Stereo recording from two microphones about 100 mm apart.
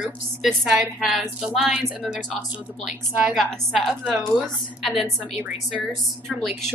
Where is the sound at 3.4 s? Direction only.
5° left (ahead or behind).